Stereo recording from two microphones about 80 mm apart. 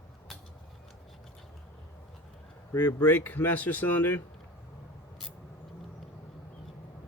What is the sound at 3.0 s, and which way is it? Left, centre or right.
Speech, left.